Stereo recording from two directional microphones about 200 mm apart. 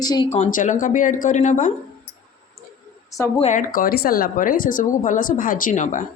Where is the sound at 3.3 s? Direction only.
35° left (ahead or behind).